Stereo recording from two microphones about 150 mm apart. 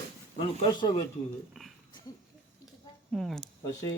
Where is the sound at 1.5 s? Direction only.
Centre (ahead or behind).